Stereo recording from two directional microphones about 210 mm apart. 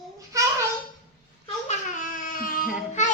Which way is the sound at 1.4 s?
35° left (ahead or behind).